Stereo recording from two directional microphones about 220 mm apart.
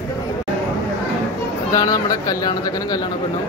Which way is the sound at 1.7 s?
15° left (ahead or behind).